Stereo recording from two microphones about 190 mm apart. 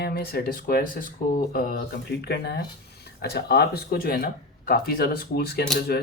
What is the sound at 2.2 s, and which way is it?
Speech, 60° left (ahead or behind).